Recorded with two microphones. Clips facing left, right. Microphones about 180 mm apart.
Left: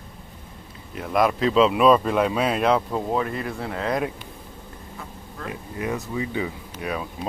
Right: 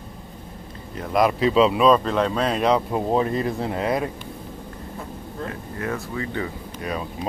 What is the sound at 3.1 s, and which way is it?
Speech, 30° right (ahead or behind).